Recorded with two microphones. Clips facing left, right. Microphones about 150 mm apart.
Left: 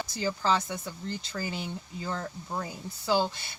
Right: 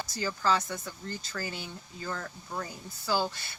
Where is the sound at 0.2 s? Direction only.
20° left (ahead or behind).